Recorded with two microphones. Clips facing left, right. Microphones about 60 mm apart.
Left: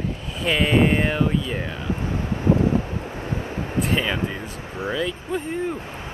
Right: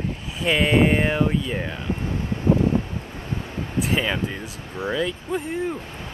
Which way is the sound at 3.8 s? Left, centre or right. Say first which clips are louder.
Even; centre.